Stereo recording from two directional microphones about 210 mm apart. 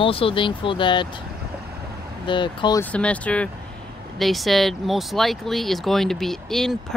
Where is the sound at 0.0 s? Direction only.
25° left (ahead or behind).